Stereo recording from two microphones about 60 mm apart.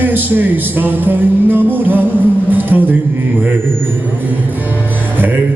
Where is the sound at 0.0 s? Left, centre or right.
Right.